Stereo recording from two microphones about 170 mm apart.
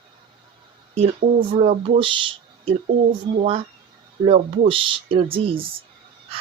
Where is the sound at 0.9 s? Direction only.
35° right (ahead or behind).